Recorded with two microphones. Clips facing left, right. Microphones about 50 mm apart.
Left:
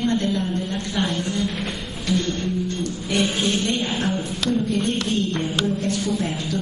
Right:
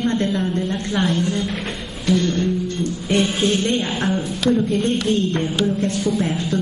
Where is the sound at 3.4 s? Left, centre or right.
Right.